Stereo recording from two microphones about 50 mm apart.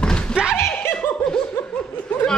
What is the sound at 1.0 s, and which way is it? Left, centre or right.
Laughter, centre.